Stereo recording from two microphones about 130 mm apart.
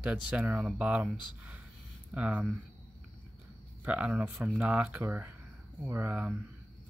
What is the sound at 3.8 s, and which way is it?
Speech, 10° right (ahead or behind).